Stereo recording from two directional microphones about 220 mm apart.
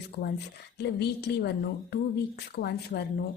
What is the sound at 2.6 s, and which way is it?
Speech, 50° left (ahead or behind).